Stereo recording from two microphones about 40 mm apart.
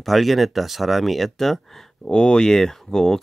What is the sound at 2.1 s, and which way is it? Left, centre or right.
Speech, left.